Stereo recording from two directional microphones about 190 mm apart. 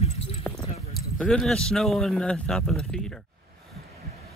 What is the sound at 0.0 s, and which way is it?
Clip-clop, 30° left (ahead or behind).